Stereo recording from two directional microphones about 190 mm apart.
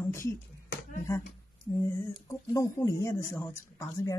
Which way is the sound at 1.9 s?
15° left (ahead or behind).